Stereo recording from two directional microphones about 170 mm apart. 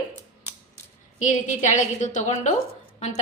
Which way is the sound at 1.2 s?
45° left (ahead or behind).